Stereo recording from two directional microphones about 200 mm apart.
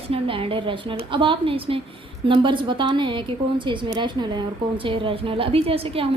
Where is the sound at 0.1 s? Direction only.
25° right (ahead or behind).